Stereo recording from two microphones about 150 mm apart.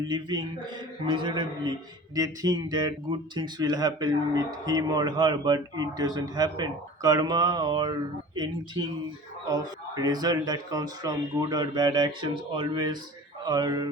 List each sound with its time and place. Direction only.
0.1 s a man's voice: 30° right (ahead or behind)
9.5 s speech: 25° right (ahead or behind)